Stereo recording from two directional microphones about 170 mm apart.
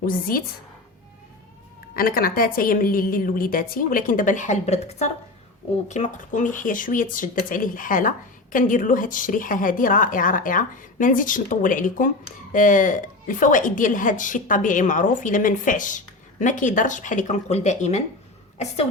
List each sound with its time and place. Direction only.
0.0 s a woman's voice: 60° left (ahead or behind)
2.0 s a woman's voice: 60° left (ahead or behind); by 18.9 s 40° left (ahead or behind)